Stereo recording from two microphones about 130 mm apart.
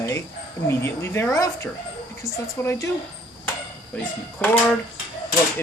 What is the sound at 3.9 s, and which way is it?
Speech, 10° left (ahead or behind).